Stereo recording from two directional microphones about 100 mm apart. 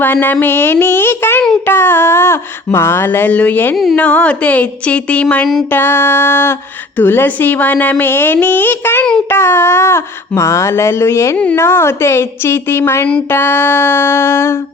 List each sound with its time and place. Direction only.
0.0 s a woman's voice: 20° left (ahead or behind)
5.7 s a woman's voice: 25° left (ahead or behind)